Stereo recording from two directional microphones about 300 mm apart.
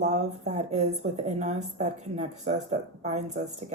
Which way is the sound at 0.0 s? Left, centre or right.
Right.